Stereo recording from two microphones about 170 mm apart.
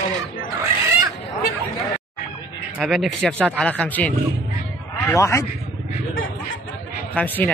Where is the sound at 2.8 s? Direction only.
Centre (ahead or behind); by 5.4 s 15° left (ahead or behind).